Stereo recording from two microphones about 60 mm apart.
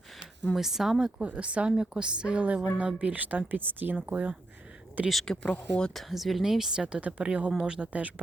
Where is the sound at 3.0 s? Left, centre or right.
Right.